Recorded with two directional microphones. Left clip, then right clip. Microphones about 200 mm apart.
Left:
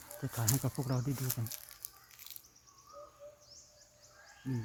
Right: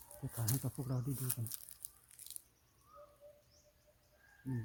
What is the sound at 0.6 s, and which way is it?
Speech, 30° left (ahead or behind).